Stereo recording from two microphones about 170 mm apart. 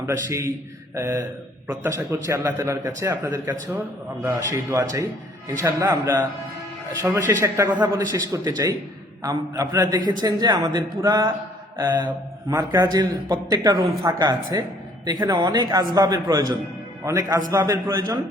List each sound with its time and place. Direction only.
0.0 s a man's voice: 15° right (ahead or behind)
7.0 s a man's voice: 10° right (ahead or behind)
12.5 s a man's voice: 20° right (ahead or behind)